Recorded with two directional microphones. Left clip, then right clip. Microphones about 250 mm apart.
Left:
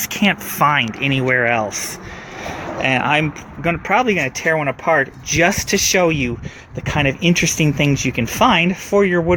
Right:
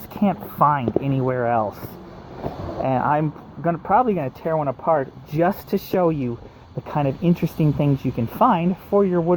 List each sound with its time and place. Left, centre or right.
0.2 s speech: left
2.8 s speech: left